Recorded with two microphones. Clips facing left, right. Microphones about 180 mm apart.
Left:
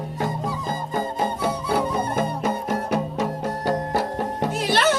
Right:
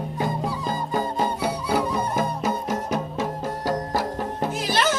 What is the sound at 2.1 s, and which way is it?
Music, 55° left (ahead or behind).